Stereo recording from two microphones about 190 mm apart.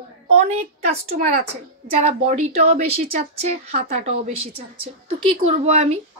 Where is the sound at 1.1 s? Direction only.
40° right (ahead or behind).